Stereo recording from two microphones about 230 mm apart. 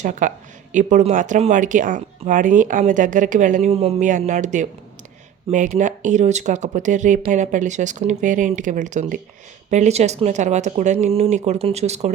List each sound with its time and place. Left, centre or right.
0.0 s speech: right